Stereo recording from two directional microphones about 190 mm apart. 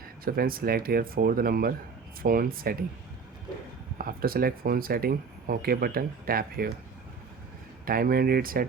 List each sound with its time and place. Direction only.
0.3 s speech: 50° right (ahead or behind)
3.9 s speech: 50° right (ahead or behind)
7.9 s speech: 50° right (ahead or behind)